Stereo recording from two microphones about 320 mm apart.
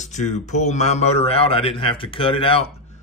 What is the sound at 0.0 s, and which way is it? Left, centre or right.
Speech, left.